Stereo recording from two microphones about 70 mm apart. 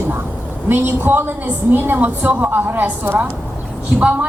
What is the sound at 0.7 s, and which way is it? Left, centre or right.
A woman's voice, right.